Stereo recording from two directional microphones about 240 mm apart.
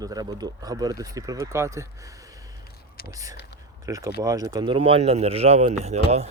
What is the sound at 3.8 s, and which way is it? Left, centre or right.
Speech, centre.